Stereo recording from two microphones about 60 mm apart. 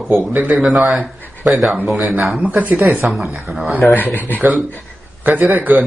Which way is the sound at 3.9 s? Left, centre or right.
Left.